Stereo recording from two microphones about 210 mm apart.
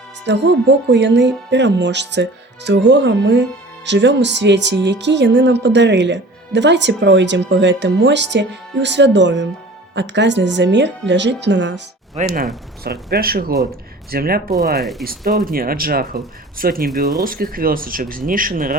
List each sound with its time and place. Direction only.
0.3 s speech: 55° right (ahead or behind)
12.1 s speech: 40° right (ahead or behind)
14.8 s speech: centre (ahead or behind)
15.0 s speech: 45° right (ahead or behind)